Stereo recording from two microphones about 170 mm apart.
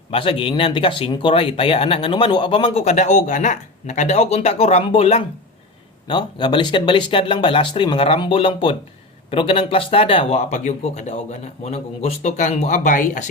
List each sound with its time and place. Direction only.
0.1 s speech: 30° left (ahead or behind); by 13.2 s 50° left (ahead or behind)